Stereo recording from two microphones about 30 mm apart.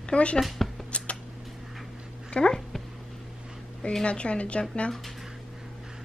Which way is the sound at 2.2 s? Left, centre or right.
Left.